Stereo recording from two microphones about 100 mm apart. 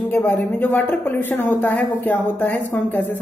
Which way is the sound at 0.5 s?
20° left (ahead or behind).